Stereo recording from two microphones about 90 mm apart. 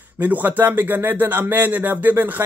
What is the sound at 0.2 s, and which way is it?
Speech, 20° right (ahead or behind).